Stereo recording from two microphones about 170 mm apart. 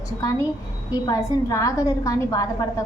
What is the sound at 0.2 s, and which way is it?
A woman's voice, 20° left (ahead or behind).